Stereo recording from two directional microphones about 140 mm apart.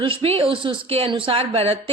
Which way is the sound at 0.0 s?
40° right (ahead or behind).